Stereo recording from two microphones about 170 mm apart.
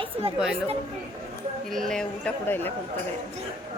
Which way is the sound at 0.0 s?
35° right (ahead or behind).